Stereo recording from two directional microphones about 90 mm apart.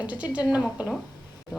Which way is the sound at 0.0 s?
15° right (ahead or behind).